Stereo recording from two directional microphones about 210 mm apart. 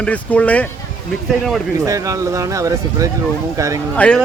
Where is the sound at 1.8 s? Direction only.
15° right (ahead or behind).